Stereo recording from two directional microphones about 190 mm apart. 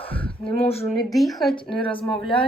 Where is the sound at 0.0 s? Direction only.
30° left (ahead or behind).